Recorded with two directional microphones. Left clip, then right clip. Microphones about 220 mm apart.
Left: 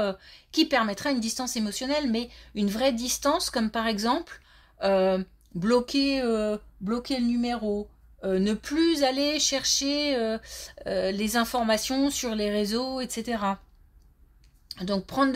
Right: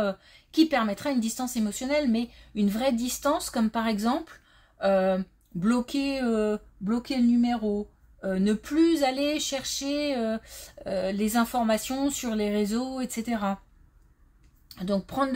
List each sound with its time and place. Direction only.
0.0 s speech: 25° left (ahead or behind)
14.7 s speech: 25° left (ahead or behind)